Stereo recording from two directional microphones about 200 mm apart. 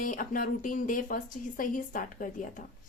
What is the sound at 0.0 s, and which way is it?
A woman's voice, 40° left (ahead or behind).